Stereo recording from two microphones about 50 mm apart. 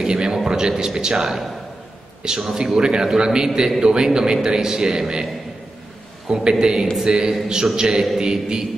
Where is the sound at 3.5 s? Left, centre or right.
Centre.